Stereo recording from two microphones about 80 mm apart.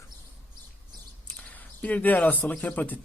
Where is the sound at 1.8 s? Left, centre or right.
Centre.